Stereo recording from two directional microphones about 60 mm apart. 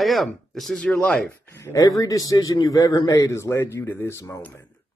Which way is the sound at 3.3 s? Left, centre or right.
Left.